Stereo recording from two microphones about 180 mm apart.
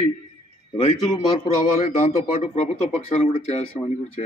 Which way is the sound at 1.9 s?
35° left (ahead or behind).